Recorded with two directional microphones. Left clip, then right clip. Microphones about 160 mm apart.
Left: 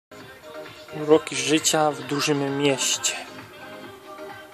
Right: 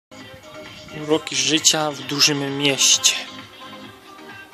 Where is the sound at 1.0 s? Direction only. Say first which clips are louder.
Left 1 dB; 15° left (ahead or behind).